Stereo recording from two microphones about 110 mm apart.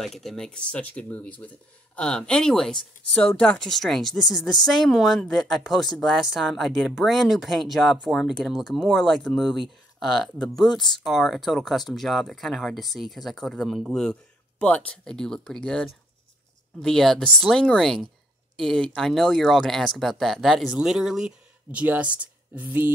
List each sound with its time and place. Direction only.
0.0 s speech: 5° left (ahead or behind); by 22.8 s 15° right (ahead or behind)